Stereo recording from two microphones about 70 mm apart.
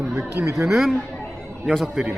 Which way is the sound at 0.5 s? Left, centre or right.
Centre.